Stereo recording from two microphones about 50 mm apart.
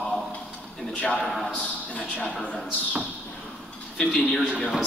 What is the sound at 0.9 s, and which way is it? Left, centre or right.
A man's voice, left.